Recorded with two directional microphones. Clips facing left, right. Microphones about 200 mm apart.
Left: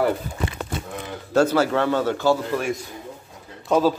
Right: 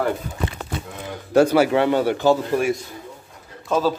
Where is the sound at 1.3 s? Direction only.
15° right (ahead or behind).